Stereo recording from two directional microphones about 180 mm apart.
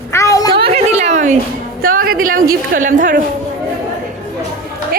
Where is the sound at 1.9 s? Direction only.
50° right (ahead or behind).